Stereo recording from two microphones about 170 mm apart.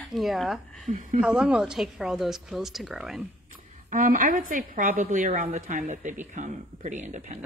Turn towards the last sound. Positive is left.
turn(degrees=-45)  # may be behind; listen again after turning